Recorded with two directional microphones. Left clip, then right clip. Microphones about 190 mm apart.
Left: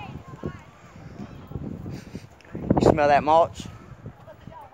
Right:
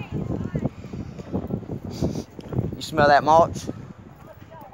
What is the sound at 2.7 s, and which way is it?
Speech, 10° right (ahead or behind).